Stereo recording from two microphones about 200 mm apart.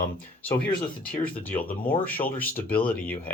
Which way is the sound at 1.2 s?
10° left (ahead or behind).